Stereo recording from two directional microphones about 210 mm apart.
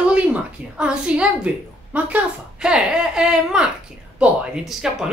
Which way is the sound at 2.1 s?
5° right (ahead or behind).